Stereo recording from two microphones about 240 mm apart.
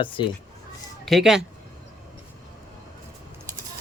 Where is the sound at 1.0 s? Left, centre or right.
Centre.